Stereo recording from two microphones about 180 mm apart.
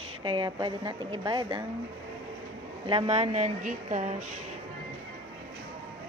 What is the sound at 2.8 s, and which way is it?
A woman's voice, 30° right (ahead or behind).